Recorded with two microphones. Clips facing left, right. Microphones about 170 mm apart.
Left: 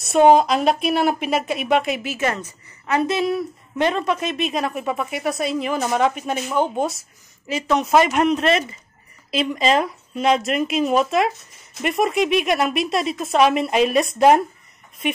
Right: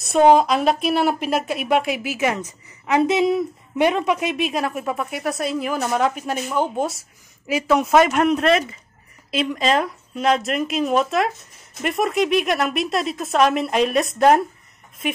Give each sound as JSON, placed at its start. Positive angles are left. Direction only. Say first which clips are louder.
{"t": 0.0, "sound": "speech", "louder": "left 1 dB", "side_deg": 0}